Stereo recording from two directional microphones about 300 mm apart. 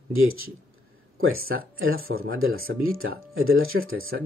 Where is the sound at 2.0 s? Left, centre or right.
Right.